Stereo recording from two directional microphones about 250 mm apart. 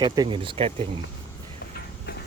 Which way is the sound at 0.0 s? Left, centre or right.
Centre.